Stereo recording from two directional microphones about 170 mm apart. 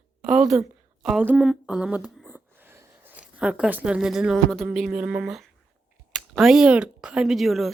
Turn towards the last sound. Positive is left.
turn(degrees=0)  # may be behind; listen again after turning